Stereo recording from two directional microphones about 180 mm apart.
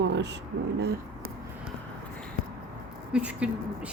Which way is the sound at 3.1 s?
5° right (ahead or behind).